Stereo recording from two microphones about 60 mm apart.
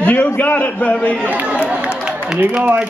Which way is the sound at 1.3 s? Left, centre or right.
Right.